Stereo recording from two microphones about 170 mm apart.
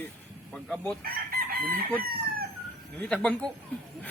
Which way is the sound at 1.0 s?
60° right (ahead or behind).